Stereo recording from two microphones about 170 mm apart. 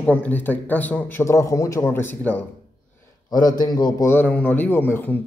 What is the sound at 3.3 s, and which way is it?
Speech, 20° left (ahead or behind).